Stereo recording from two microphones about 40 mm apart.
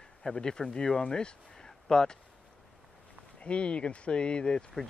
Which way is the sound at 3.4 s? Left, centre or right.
Left.